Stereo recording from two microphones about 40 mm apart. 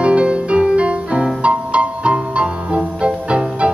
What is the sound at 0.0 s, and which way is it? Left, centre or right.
Music, right.